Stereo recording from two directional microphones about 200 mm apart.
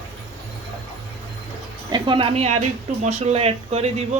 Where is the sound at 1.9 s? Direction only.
25° right (ahead or behind).